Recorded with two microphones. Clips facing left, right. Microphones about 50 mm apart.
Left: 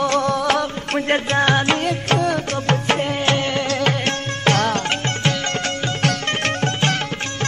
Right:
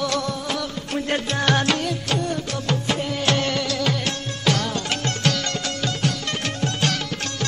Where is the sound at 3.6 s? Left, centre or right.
Left.